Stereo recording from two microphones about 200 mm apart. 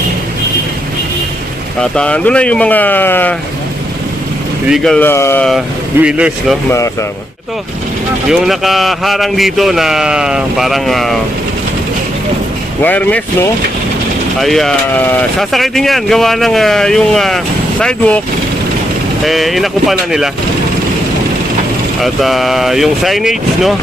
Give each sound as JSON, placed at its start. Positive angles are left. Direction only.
{"t": 1.8, "sound": "speech", "side_deg": 5}
{"t": 4.7, "sound": "speech", "side_deg": 0}
{"t": 5.5, "sound": "speech", "side_deg": -5}
{"t": 6.7, "sound": "speech", "side_deg": 15}
{"t": 8.3, "sound": "speech", "side_deg": 0}
{"t": 12.8, "sound": "speech", "side_deg": 10}
{"t": 14.4, "sound": "speech", "side_deg": 0}
{"t": 19.2, "sound": "speech", "side_deg": 0}
{"t": 22.0, "sound": "speech", "side_deg": 0}